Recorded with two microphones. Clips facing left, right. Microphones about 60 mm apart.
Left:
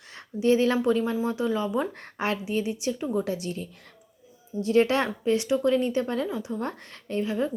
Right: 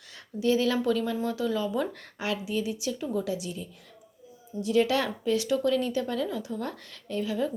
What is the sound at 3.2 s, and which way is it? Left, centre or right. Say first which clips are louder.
A woman's voice: left 2 dB; left.